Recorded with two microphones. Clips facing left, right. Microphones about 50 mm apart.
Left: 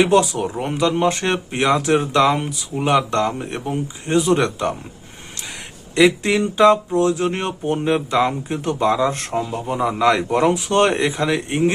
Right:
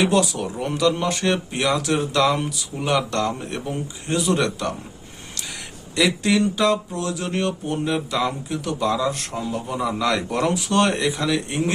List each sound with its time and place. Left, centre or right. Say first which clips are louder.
0.0 s speech: left 4 dB; left
5.9 s speech: left 4 dB; left